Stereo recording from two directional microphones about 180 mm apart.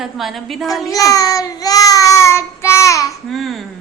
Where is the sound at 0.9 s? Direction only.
20° left (ahead or behind).